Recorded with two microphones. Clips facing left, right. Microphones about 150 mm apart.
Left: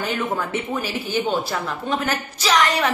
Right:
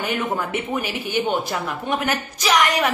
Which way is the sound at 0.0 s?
15° right (ahead or behind).